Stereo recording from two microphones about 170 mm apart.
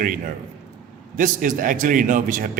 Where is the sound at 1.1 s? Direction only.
50° right (ahead or behind).